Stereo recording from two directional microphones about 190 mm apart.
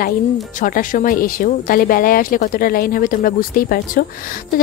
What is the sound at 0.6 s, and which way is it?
A woman's voice, 45° left (ahead or behind).